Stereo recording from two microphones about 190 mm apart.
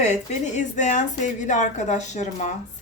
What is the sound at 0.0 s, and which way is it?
A woman's voice, 40° left (ahead or behind).